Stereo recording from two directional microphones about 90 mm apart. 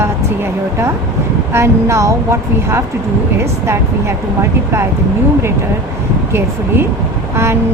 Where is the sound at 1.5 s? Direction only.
30° right (ahead or behind).